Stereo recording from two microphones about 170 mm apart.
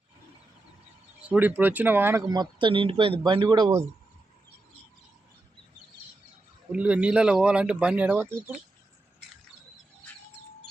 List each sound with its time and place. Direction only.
1.3 s speech: 10° right (ahead or behind)
6.7 s speech: 5° right (ahead or behind)